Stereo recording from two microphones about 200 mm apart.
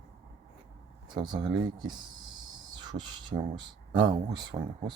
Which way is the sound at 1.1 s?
20° right (ahead or behind).